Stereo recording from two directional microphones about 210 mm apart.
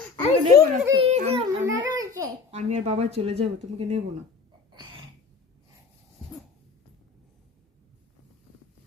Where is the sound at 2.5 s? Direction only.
30° right (ahead or behind).